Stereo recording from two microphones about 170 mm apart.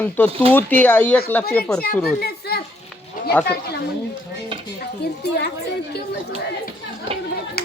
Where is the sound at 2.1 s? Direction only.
70° left (ahead or behind).